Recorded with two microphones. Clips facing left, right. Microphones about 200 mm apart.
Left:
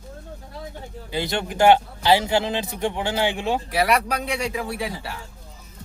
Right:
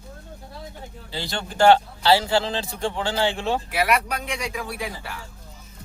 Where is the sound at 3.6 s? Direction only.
35° left (ahead or behind).